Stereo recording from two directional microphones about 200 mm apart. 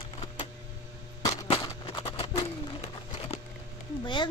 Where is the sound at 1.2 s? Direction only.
20° left (ahead or behind).